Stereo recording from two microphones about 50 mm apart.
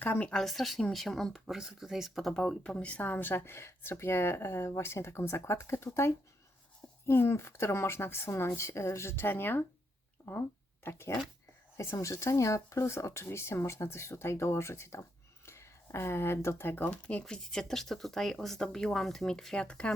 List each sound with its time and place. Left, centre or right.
0.0 s speech: left
0.3 s speech: centre
2.3 s speech: centre
2.7 s speech: left
5.9 s speech: left
7.1 s speech: left
8.5 s speech: left
11.8 s speech: left
13.2 s speech: left
16.9 s speech: left
17.2 s speech: centre
19.5 s speech: left